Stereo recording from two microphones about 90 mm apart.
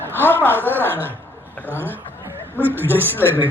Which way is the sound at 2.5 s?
20° right (ahead or behind).